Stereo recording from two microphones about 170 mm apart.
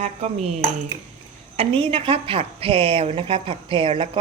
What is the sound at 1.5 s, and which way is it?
A woman's voice, 35° right (ahead or behind).